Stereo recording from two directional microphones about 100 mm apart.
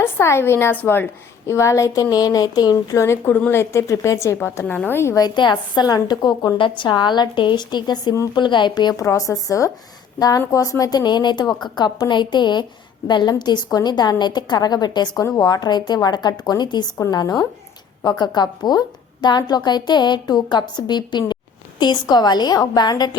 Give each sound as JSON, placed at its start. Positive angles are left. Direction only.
{"t": 0.0, "sound": "a woman's voice", "side_deg": 25}
{"t": 5.1, "sound": "a woman's voice", "side_deg": 45}
{"t": 9.0, "sound": "a woman's voice", "side_deg": 30}